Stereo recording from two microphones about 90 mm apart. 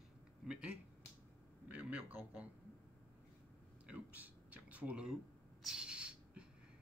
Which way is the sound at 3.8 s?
15° right (ahead or behind).